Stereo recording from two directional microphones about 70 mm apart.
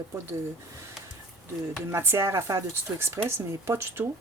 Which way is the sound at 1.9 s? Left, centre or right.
Right.